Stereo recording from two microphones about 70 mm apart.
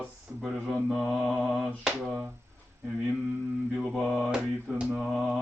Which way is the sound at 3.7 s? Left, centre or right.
Centre.